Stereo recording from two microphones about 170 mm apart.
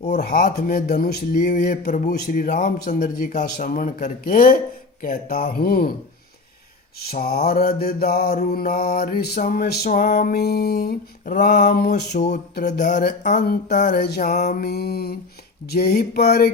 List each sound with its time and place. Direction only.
0.5 s mantra: 70° left (ahead or behind)
1.5 s speech: 45° left (ahead or behind)
1.8 s speech: 60° left (ahead or behind)
5.0 s mantra: 60° left (ahead or behind)
7.1 s mantra: 65° left (ahead or behind)
9.6 s a sound: 70° left (ahead or behind)
11.3 s speech: 45° left (ahead or behind)
12.5 s a sound: 80° left
13.4 s mantra: 65° left (ahead or behind)
13.8 s a sound: 75° left (ahead or behind)
14.2 s speech: 45° left (ahead or behind)
14.4 s a sound: 65° left (ahead or behind)